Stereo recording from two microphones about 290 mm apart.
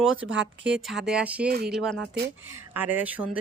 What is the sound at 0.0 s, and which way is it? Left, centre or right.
Speech, centre.